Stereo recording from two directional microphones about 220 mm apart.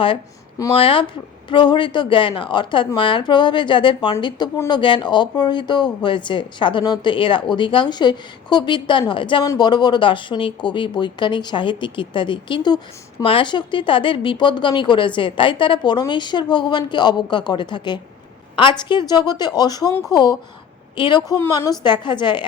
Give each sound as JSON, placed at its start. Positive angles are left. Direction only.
{"t": 0.7, "sound": "speech", "side_deg": 25}